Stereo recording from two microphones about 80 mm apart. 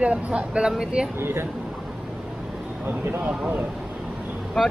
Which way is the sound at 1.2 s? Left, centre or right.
Right.